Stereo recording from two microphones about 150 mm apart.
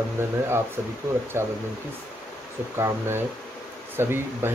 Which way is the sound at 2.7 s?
15° right (ahead or behind).